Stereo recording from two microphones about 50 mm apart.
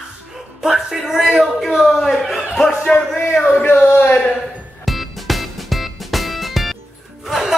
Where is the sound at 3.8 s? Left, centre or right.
Left.